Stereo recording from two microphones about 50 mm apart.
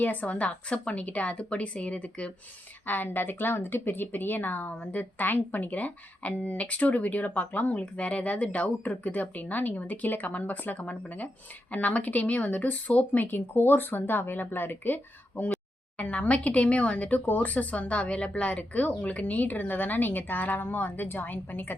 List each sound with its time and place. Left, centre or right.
0.0 s a woman's voice: left
2.8 s a woman's voice: left
13.3 s speech: left
16.0 s speech: left